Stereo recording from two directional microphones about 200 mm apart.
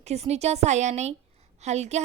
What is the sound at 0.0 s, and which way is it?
A woman's voice, 30° right (ahead or behind).